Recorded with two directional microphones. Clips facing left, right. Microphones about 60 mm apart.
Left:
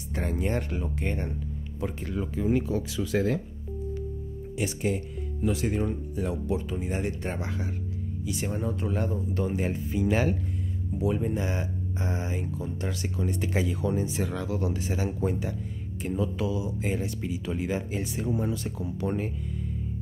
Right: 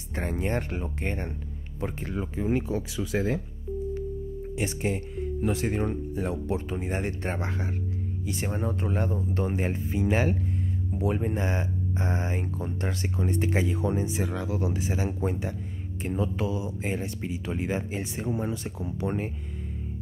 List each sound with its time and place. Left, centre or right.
0.1 s speech: right
4.6 s speech: right
11.0 s speech: right; by 15.0 s centre
15.0 s speech: right